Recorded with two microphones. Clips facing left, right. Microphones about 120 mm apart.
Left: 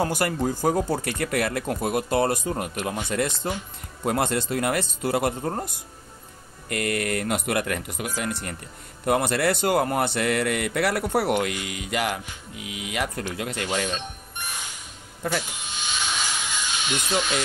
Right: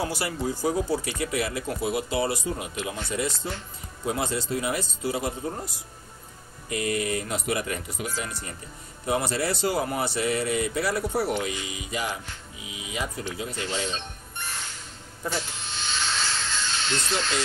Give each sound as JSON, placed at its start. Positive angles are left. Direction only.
{"t": 0.0, "sound": "speech", "side_deg": 50}
{"t": 6.7, "sound": "speech", "side_deg": 65}
{"t": 14.3, "sound": "music", "side_deg": 15}
{"t": 15.4, "sound": "a sound", "side_deg": 15}